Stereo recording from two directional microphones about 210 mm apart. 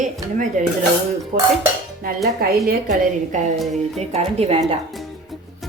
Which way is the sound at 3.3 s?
35° right (ahead or behind).